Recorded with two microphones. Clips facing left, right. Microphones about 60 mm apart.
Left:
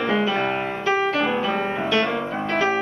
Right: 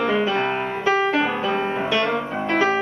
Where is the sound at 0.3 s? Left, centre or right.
Centre.